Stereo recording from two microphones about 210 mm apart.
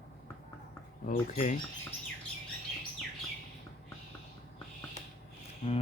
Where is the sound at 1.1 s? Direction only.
40° left (ahead or behind).